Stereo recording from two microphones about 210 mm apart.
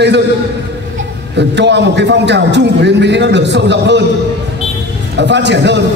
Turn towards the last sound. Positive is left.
turn(degrees=-55)  # may be behind; listen again after turning